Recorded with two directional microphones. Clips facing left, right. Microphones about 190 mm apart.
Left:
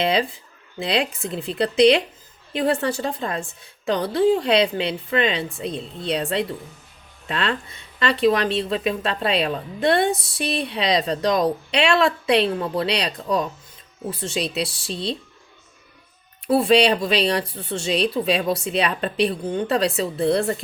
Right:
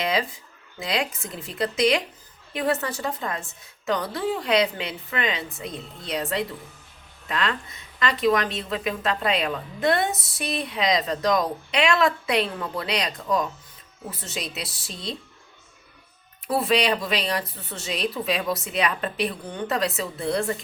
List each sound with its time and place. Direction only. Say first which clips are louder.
0.0 s a woman's voice: left 4 dB; 25° left (ahead or behind)
16.5 s a woman's voice: left 6 dB; 30° left (ahead or behind)